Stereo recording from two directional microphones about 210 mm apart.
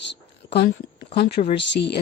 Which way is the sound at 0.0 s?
55° left (ahead or behind).